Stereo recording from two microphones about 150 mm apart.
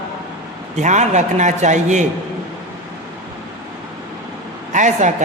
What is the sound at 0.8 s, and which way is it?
A man's voice, 50° right (ahead or behind).